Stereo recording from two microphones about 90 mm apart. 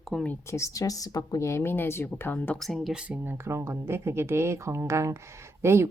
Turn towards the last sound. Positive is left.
turn(degrees=-30)  # may be behind; listen again after turning